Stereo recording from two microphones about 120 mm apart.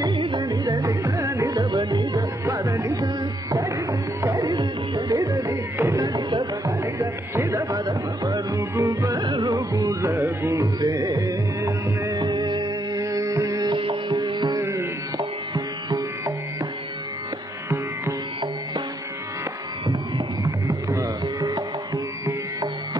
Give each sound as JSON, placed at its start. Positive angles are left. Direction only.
{"t": 0.0, "sound": "music", "side_deg": -40}
{"t": 2.6, "sound": "music", "side_deg": -25}
{"t": 4.4, "sound": "music", "side_deg": -35}
{"t": 6.8, "sound": "music", "side_deg": -25}
{"t": 10.1, "sound": "music", "side_deg": -15}
{"t": 10.6, "sound": "music", "side_deg": -30}
{"t": 14.6, "sound": "music", "side_deg": -20}
{"t": 15.1, "sound": "music", "side_deg": -40}
{"t": 20.4, "sound": "music", "side_deg": -30}